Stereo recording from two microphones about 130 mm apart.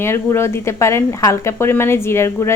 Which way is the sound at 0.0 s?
20° left (ahead or behind).